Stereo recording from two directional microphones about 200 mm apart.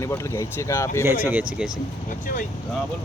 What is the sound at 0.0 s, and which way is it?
Speech, 15° left (ahead or behind).